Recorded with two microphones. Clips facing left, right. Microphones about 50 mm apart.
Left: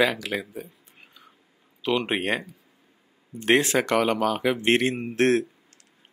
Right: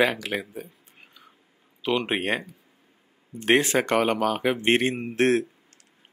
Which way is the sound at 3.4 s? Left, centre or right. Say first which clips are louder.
Even; right.